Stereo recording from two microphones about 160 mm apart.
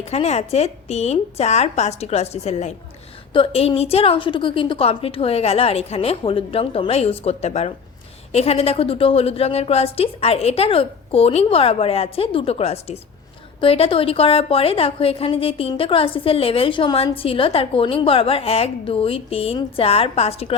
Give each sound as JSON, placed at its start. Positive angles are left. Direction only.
{"t": 0.0, "sound": "a woman's voice", "side_deg": 40}